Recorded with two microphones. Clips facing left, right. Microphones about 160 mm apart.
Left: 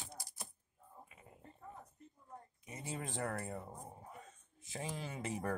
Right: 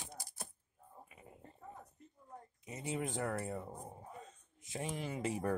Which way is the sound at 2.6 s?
20° right (ahead or behind).